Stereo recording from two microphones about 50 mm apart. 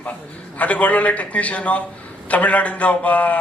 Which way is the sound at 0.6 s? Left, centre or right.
Left.